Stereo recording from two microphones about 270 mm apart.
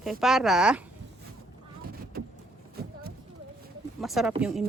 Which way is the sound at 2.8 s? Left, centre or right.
Right.